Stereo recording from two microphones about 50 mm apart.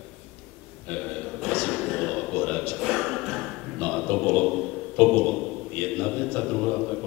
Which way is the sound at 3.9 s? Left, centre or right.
Centre.